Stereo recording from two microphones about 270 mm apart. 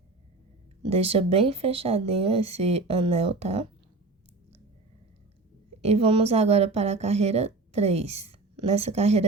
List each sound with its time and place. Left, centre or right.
0.9 s a woman's voice: right
5.8 s a woman's voice: right